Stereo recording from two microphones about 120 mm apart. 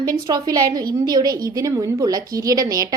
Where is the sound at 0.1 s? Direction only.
35° right (ahead or behind).